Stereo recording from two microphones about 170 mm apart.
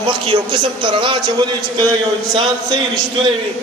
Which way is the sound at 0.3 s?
30° right (ahead or behind).